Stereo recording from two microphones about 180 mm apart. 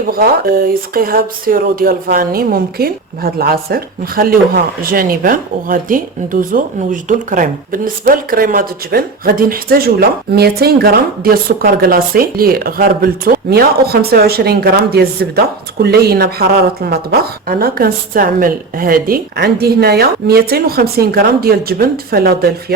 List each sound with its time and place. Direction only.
0.1 s speech: 55° right (ahead or behind)